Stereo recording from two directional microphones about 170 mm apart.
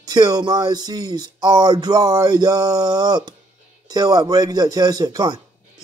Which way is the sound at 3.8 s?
20° right (ahead or behind).